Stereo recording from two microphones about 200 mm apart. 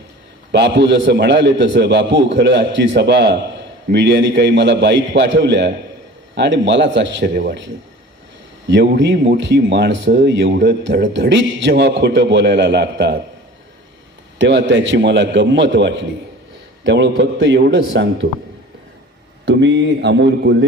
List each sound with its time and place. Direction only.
0.5 s speech: 60° right (ahead or behind)
14.3 s speech: 65° right (ahead or behind)
19.5 s speech: 60° right (ahead or behind)